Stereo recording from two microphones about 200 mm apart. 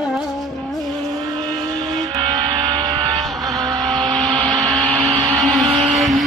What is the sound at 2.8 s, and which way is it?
Vehicle, 20° right (ahead or behind).